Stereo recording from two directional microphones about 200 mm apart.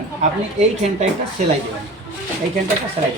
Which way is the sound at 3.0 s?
30° right (ahead or behind).